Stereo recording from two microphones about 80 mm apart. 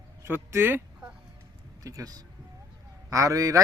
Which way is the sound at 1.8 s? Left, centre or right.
Right.